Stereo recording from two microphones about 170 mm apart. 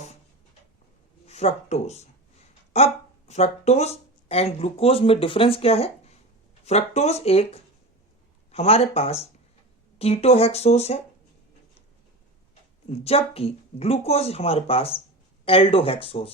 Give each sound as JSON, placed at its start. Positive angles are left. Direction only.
{"t": 1.3, "sound": "speech", "side_deg": 40}
{"t": 12.9, "sound": "speech", "side_deg": 35}